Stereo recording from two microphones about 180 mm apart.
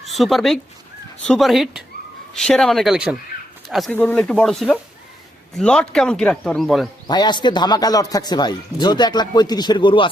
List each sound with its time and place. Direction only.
0.0 s a man's voice: centre (ahead or behind)
7.1 s speech: 25° left (ahead or behind)